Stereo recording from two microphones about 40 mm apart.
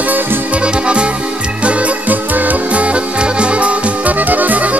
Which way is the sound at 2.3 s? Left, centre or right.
Right.